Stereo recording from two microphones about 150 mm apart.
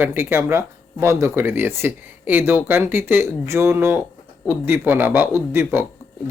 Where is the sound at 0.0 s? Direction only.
15° right (ahead or behind).